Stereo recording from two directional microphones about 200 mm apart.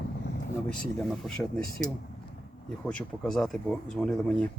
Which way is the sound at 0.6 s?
5° left (ahead or behind).